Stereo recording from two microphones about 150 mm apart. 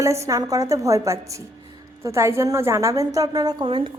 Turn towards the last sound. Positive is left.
turn(degrees=-35)  # may be behind; listen again after turning